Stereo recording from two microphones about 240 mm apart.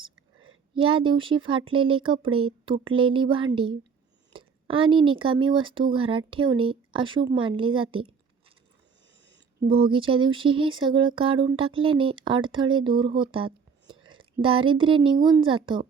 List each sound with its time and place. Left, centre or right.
0.8 s speech: right
9.6 s speech: right
13.3 s a sound: right
14.0 s a woman's voice: right